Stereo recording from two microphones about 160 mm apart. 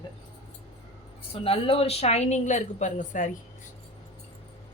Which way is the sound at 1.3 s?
35° left (ahead or behind).